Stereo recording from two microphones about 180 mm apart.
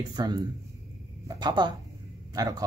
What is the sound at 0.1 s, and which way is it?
Speech, 20° right (ahead or behind).